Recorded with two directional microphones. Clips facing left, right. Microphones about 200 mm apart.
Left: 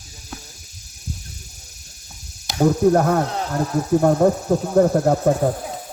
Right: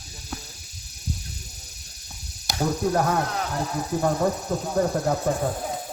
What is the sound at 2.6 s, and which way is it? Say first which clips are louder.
Speech: left 8 dB; 55° left (ahead or behind).